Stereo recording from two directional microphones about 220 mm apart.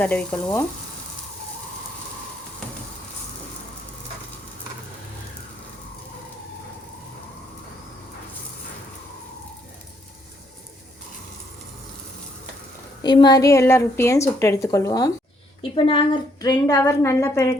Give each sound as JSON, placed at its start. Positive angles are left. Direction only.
{"t": 0.0, "sound": "speech", "side_deg": 5}
{"t": 13.0, "sound": "a woman's voice", "side_deg": 20}